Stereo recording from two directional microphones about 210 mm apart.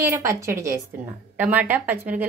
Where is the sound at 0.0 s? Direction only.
15° right (ahead or behind).